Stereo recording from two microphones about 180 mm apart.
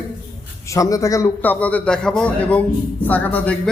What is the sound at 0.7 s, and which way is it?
A man's voice, 20° left (ahead or behind).